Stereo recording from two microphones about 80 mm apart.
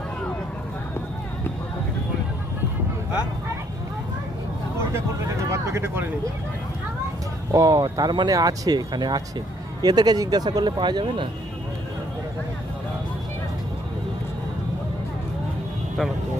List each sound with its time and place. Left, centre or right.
5.5 s speech: right
7.5 s speech: right
8.3 s speech: right